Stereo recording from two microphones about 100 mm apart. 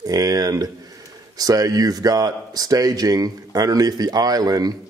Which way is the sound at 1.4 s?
40° right (ahead or behind).